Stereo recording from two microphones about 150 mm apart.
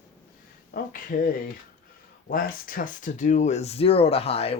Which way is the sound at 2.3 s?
70° left (ahead or behind).